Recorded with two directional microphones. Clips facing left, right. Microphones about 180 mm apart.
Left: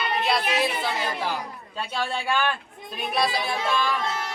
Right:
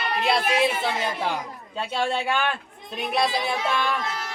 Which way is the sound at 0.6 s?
25° right (ahead or behind).